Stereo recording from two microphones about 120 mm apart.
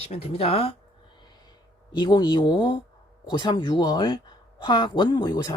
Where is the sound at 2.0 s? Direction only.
35° left (ahead or behind).